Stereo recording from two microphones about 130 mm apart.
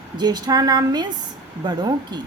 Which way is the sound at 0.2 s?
30° right (ahead or behind).